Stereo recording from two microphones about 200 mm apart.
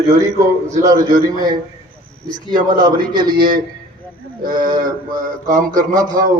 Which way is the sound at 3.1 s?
20° right (ahead or behind).